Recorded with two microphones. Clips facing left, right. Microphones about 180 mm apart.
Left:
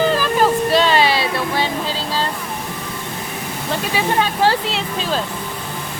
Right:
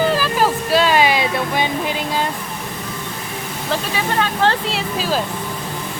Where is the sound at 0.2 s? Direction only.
5° right (ahead or behind).